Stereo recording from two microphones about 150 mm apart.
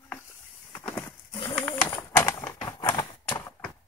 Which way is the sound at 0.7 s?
10° left (ahead or behind).